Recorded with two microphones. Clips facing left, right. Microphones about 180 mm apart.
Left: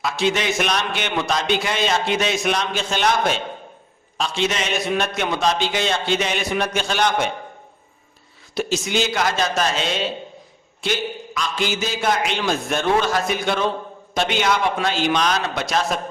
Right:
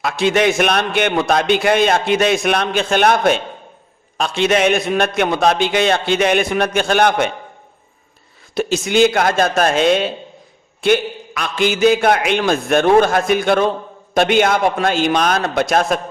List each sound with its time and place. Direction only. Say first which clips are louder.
0.0 s a man's voice: right 6 dB; 55° right (ahead or behind)
8.5 s a man's voice: right 7 dB; 55° right (ahead or behind)